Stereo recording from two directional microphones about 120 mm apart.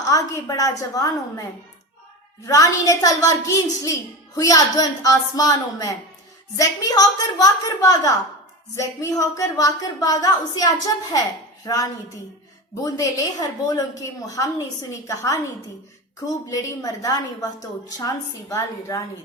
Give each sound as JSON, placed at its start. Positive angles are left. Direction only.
{"t": 0.0, "sound": "a woman's voice", "side_deg": 30}